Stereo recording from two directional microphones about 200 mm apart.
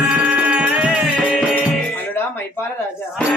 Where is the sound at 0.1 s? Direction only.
5° right (ahead or behind).